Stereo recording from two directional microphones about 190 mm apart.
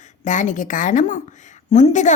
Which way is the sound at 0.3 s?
40° left (ahead or behind).